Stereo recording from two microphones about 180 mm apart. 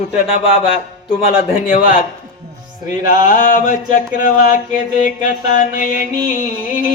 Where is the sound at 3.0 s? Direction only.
45° left (ahead or behind).